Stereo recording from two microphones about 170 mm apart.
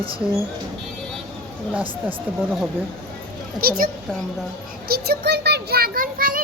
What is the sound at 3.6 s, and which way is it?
Speech, 60° right (ahead or behind).